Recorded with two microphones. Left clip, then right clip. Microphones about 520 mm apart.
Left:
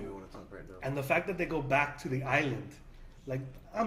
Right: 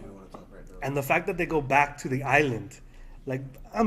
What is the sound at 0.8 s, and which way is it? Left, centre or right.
A man's voice, right.